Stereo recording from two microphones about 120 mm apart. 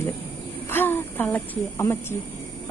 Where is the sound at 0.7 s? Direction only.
20° left (ahead or behind).